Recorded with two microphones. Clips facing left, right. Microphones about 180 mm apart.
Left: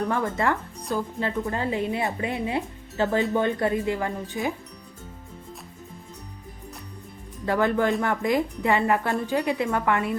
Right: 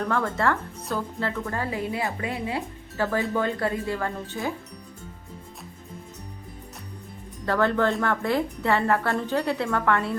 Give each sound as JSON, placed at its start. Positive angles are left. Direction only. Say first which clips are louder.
{"t": 0.1, "sound": "speech", "louder": "even", "side_deg": 15}
{"t": 7.4, "sound": "a woman's voice", "louder": "even", "side_deg": 15}